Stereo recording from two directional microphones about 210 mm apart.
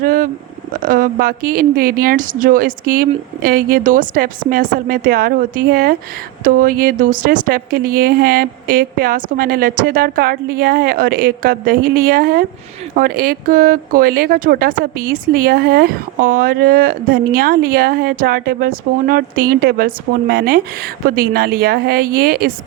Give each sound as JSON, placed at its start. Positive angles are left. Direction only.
{"t": 0.0, "sound": "speech", "side_deg": -40}